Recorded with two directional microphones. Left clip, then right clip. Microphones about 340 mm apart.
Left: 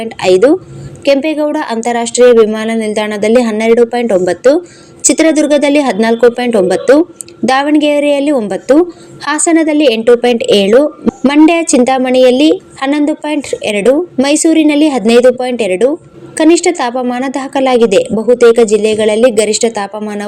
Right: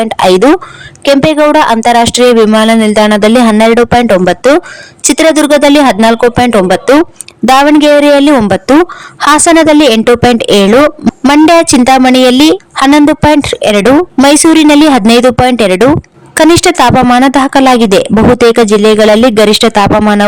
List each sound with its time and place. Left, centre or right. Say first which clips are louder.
0.0 s speech: right 3 dB; right